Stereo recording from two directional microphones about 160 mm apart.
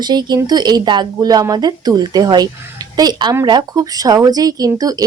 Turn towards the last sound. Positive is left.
turn(degrees=-25)  # may be behind; listen again after turning